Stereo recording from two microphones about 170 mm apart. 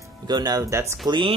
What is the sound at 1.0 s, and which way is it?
Speech, 30° right (ahead or behind).